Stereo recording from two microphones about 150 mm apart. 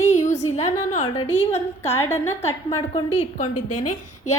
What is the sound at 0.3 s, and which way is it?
A woman's voice, 45° left (ahead or behind).